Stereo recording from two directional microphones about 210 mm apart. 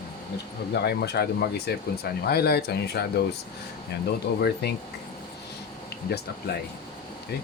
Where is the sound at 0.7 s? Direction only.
50° left (ahead or behind).